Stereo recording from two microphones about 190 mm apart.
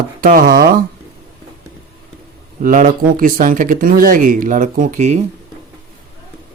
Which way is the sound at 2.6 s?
45° right (ahead or behind).